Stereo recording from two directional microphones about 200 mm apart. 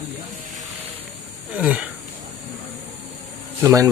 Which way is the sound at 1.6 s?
5° right (ahead or behind).